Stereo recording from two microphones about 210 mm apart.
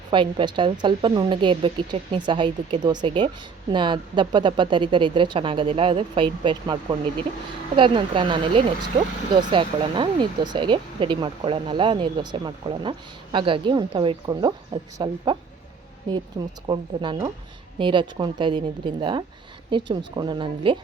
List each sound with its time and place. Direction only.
0.1 s speech: 25° right (ahead or behind)